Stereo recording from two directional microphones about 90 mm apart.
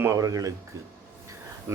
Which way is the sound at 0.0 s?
35° right (ahead or behind).